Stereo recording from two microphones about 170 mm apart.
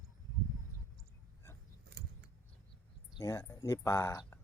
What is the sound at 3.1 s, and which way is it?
Speech, 20° left (ahead or behind).